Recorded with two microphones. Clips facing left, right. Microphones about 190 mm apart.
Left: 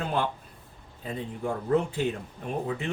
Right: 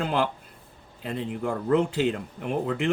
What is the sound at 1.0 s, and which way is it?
Speech, 80° right.